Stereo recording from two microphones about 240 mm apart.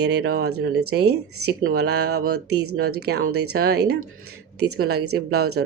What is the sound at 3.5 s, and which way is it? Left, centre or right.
A woman's voice, right.